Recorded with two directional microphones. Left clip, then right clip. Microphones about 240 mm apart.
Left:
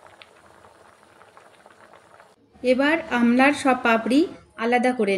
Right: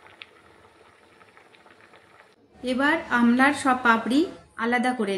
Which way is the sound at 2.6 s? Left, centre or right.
Centre.